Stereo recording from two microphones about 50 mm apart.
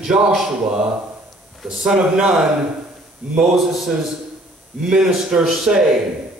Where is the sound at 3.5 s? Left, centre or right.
Centre.